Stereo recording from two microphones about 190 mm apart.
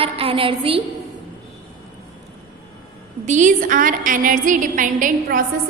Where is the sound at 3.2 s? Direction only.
40° right (ahead or behind).